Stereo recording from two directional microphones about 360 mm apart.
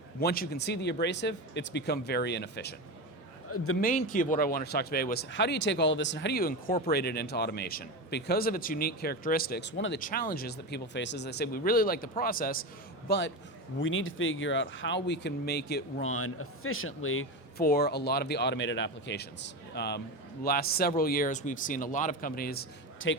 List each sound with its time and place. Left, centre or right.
0.2 s speech: left
3.8 s speech: left